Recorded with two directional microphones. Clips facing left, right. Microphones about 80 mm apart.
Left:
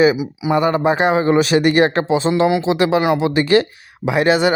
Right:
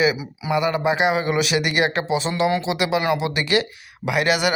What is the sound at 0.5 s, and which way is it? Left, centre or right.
A man's voice, left.